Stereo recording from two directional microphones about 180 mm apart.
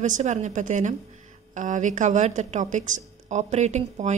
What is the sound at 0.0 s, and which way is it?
A woman's voice, 45° right (ahead or behind).